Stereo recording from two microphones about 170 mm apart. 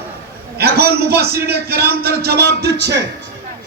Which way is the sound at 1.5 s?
65° right (ahead or behind).